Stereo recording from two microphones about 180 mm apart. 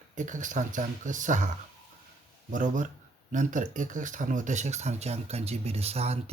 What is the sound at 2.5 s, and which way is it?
Speech, 45° right (ahead or behind).